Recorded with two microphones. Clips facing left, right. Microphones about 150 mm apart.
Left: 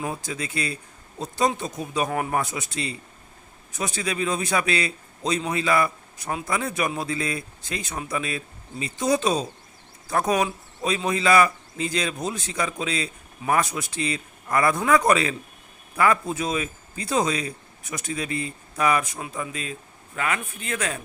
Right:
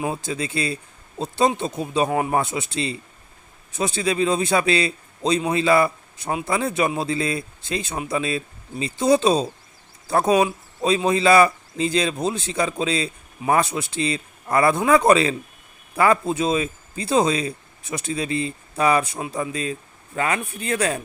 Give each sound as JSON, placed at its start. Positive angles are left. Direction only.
{"t": 0.0, "sound": "a man's voice", "side_deg": -25}